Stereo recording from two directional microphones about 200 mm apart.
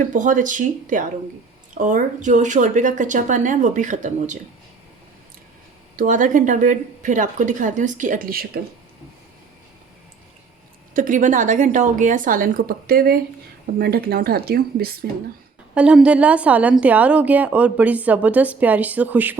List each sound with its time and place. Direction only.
0.0 s a woman's voice: 40° right (ahead or behind)
6.0 s a woman's voice: 40° right (ahead or behind)
10.9 s a woman's voice: 40° right (ahead or behind)
15.7 s a woman's voice: 5° right (ahead or behind)